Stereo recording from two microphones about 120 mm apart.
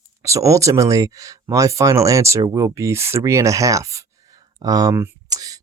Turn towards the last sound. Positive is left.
turn(degrees=-30)  # may be behind; listen again after turning